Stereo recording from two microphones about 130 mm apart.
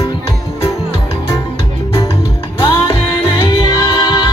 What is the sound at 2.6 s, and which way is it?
Music, 40° left (ahead or behind).